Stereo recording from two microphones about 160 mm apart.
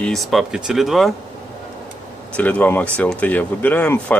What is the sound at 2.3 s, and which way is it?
Speech, 10° left (ahead or behind).